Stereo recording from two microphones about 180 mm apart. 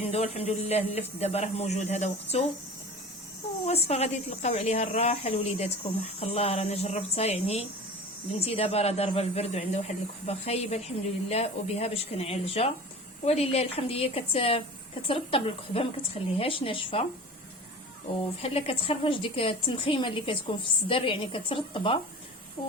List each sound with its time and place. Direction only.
0.1 s speech: 35° left (ahead or behind)
3.7 s a woman's voice: 35° left (ahead or behind)
18.4 s a woman's voice: 35° left (ahead or behind)